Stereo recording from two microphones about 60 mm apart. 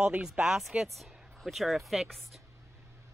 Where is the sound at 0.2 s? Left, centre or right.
Centre.